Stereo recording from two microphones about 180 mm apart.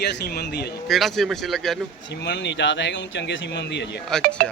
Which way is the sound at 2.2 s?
75° left (ahead or behind).